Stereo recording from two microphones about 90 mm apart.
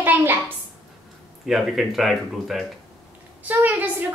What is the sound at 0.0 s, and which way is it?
Speech, 20° right (ahead or behind).